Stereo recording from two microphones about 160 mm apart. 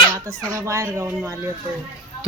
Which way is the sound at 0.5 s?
20° right (ahead or behind).